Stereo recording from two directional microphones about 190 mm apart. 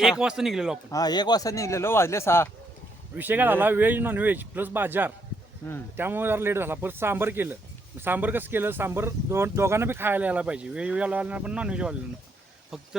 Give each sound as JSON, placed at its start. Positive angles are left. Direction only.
{"t": 0.0, "sound": "a man's voice", "side_deg": -5}
{"t": 0.9, "sound": "speech", "side_deg": 20}
{"t": 3.2, "sound": "speech", "side_deg": -10}
{"t": 5.6, "sound": "speech", "side_deg": 15}
{"t": 6.0, "sound": "a man's voice", "side_deg": -10}